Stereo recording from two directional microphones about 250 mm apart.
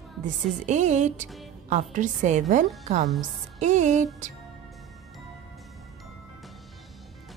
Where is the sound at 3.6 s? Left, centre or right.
Right.